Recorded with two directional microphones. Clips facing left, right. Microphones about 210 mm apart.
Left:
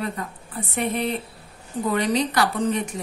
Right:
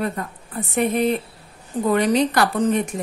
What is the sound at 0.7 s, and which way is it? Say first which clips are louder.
Speech: right 5 dB; 50° right (ahead or behind).